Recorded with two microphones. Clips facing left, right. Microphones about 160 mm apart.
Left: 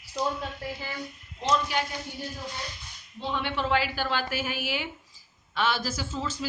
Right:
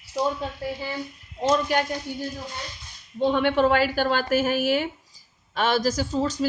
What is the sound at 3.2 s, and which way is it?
A woman's voice, 55° right (ahead or behind).